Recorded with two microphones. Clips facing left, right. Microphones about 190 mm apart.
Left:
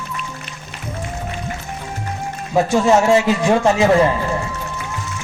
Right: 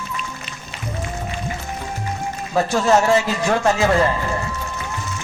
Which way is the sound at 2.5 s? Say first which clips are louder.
Left 3 dB; 15° left (ahead or behind).